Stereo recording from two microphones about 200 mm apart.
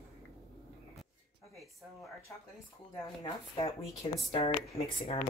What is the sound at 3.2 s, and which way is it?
Speech, 30° left (ahead or behind).